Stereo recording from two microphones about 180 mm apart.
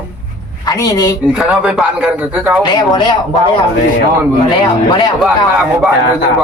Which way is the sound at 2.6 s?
25° left (ahead or behind).